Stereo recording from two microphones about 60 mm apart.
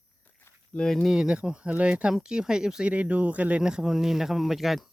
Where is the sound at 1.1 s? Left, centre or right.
Centre.